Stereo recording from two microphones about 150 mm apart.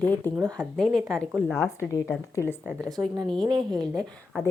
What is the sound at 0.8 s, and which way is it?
Speech, centre (ahead or behind).